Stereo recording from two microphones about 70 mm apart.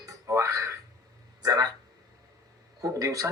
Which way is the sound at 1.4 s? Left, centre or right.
Right.